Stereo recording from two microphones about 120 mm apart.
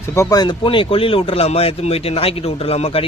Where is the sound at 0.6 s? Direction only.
45° left (ahead or behind).